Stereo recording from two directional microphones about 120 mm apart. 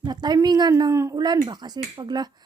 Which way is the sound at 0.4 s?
35° right (ahead or behind).